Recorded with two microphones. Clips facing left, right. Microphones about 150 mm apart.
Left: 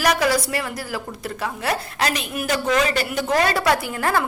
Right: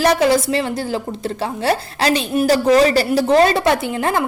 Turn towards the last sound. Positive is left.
turn(degrees=-20)  # may be behind; listen again after turning